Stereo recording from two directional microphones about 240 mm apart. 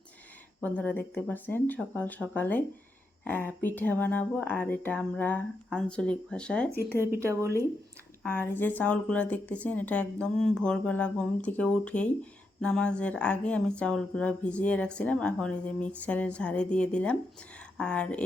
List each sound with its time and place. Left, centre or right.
0.6 s speech: centre
7.2 s speech: centre
8.2 s speech: centre